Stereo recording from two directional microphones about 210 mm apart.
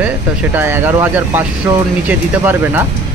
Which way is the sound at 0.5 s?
10° right (ahead or behind).